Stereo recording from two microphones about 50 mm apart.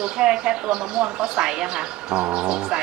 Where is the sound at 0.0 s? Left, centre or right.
Centre.